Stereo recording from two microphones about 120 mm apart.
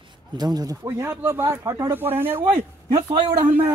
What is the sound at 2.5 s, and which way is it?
Speech, 50° right (ahead or behind).